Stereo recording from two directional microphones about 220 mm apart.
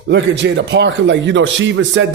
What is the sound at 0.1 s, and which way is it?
A man's voice, 55° right (ahead or behind).